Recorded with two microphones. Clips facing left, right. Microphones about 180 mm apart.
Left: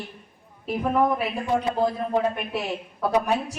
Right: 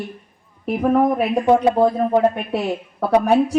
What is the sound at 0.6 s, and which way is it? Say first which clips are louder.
Speech: right 6 dB; 55° right (ahead or behind).